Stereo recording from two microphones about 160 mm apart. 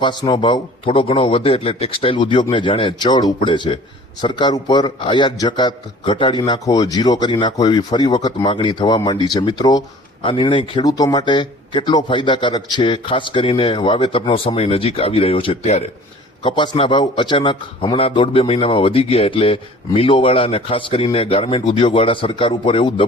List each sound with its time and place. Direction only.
0.0 s a man's voice: 30° left (ahead or behind)